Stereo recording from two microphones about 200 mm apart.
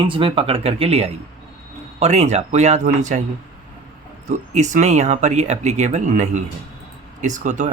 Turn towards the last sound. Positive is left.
turn(degrees=-40)  # may be behind; listen again after turning